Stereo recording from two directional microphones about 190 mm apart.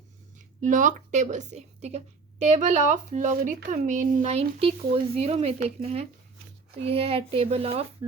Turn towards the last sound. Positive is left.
turn(degrees=-30)  # may be behind; listen again after turning